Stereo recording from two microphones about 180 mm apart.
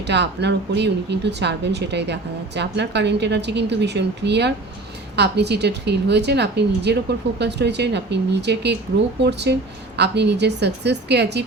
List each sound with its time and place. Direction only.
0.1 s speech: 70° right (ahead or behind)